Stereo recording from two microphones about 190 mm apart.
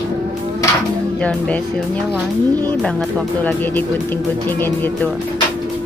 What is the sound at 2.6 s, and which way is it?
Speech, 5° left (ahead or behind).